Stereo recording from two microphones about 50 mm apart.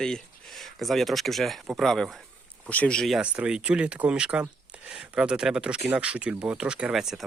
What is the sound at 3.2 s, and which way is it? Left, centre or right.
Speech, right.